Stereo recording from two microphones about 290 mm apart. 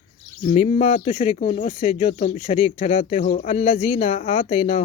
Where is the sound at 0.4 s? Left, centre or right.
Left.